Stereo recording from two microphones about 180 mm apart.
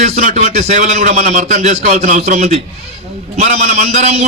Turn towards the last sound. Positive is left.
turn(degrees=-40)  # may be behind; listen again after turning